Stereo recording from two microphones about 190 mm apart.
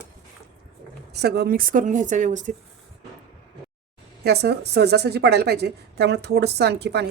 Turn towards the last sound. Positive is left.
turn(degrees=-60)  # may be behind; listen again after turning